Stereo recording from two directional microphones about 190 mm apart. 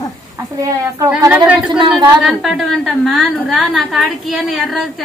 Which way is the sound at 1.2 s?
5° right (ahead or behind).